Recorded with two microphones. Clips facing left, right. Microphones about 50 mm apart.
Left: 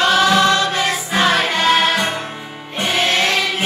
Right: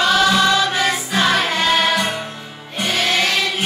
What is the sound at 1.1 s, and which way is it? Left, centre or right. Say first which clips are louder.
Music: left 3 dB; centre.